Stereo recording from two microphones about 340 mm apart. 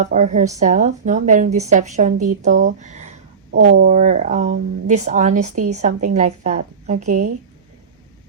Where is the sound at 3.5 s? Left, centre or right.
Right.